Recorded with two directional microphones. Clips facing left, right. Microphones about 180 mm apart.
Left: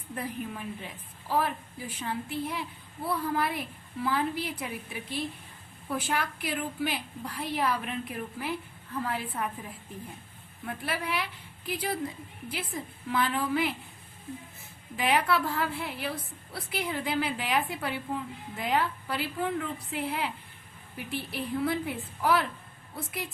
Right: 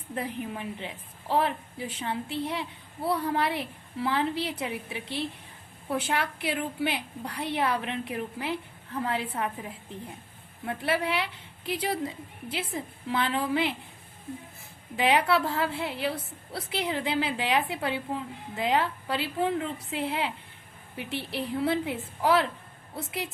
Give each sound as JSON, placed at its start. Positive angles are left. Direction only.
{"t": 0.2, "sound": "a woman's voice", "side_deg": -20}
{"t": 10.7, "sound": "a woman's voice", "side_deg": -25}
{"t": 14.9, "sound": "a woman's voice", "side_deg": -25}